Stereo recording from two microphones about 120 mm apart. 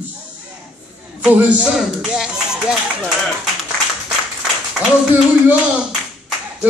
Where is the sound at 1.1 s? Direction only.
10° right (ahead or behind).